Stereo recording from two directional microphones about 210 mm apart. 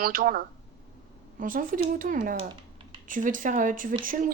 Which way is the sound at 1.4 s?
40° right (ahead or behind).